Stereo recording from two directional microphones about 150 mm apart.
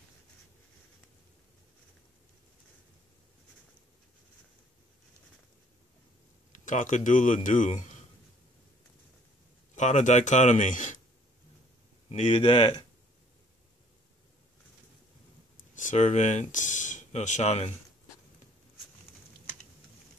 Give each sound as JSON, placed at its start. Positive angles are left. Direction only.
{"t": 6.5, "sound": "speech", "side_deg": 55}
{"t": 9.8, "sound": "speech", "side_deg": 55}
{"t": 12.1, "sound": "speech", "side_deg": 45}
{"t": 15.8, "sound": "speech", "side_deg": 55}